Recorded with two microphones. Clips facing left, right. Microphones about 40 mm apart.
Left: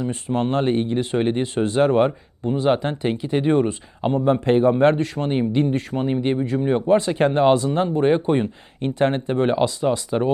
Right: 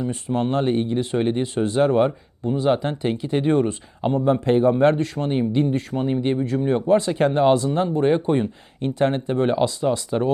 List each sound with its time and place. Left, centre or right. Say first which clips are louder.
0.0 s speech: left 1 dB; left